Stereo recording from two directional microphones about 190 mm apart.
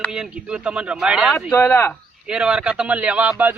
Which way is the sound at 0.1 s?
5° right (ahead or behind).